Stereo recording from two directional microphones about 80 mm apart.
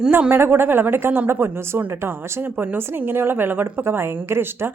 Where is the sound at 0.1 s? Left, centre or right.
Right.